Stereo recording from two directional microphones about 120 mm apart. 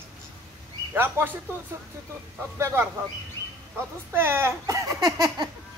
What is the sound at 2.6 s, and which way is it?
Speech, 20° right (ahead or behind).